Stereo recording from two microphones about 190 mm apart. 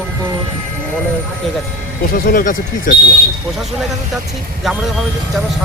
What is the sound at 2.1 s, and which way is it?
Speech, 45° left (ahead or behind).